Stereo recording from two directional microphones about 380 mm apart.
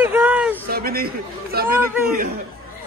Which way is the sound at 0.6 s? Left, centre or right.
Right.